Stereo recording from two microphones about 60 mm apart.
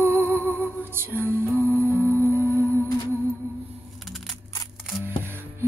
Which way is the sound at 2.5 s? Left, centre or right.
Left.